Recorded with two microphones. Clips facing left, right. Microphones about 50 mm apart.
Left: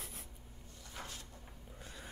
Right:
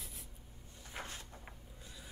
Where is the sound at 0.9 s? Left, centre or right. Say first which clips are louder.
Right 2 dB; right.